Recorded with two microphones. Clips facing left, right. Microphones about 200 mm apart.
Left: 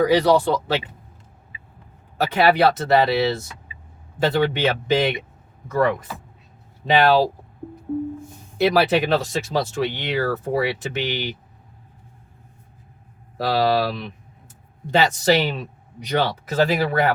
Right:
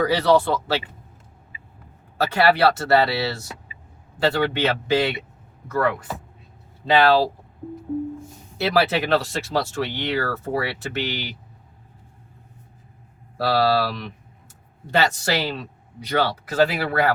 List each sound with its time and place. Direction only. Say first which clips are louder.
0.0 s speech: left 2 dB; 15° left (ahead or behind)
2.1 s speech: left 1 dB; 15° left (ahead or behind)
8.5 s speech: left 3 dB; 15° left (ahead or behind)
13.3 s speech: even; 15° left (ahead or behind)